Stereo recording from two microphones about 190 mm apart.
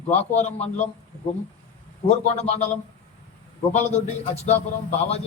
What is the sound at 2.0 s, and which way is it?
Speech, 35° left (ahead or behind).